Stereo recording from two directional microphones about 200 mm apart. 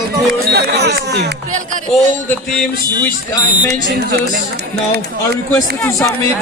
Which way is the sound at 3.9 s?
55° right (ahead or behind).